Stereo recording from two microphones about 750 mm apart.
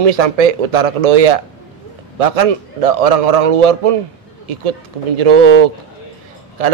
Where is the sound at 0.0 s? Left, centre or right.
Right.